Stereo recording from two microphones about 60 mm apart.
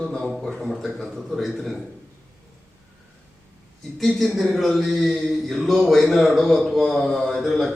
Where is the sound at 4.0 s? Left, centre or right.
Centre.